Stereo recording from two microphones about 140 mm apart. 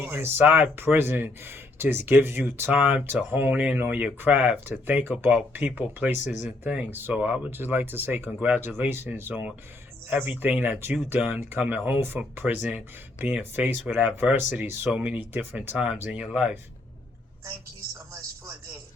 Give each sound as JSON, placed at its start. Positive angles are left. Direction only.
{"t": 0.0, "sound": "speech", "side_deg": -15}
{"t": 6.2, "sound": "speech", "side_deg": 60}
{"t": 6.7, "sound": "speech", "side_deg": -10}